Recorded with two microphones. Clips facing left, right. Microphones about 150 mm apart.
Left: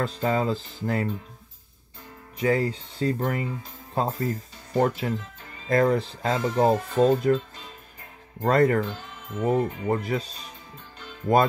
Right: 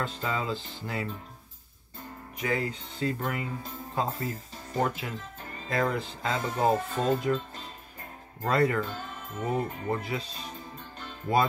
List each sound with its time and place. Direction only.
0.0 s speech: 40° left (ahead or behind)
2.4 s speech: 35° left (ahead or behind)
8.5 s speech: 45° left (ahead or behind)